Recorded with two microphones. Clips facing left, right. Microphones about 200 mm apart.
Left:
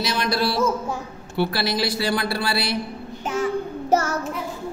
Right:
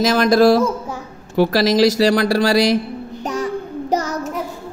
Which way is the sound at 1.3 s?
90° right.